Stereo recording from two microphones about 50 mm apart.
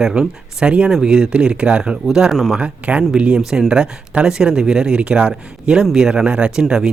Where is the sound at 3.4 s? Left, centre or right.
Centre.